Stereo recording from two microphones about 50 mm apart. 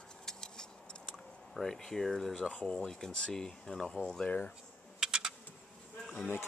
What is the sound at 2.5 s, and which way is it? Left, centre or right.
Speech, left.